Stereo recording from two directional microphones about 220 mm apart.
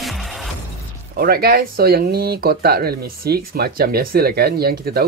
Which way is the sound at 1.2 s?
45° right (ahead or behind).